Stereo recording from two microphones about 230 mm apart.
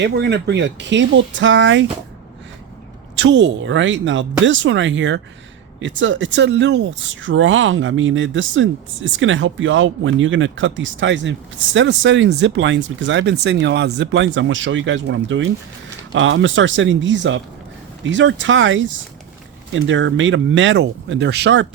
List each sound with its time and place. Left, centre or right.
0.0 s speech: right
3.2 s speech: right